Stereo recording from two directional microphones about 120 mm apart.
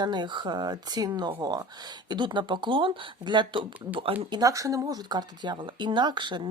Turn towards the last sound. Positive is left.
turn(degrees=-40)  # may be behind; listen again after turning